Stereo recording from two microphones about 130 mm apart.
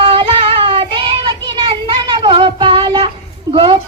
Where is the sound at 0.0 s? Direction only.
45° right (ahead or behind).